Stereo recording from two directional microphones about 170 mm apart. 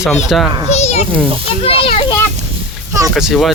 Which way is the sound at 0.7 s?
40° left (ahead or behind).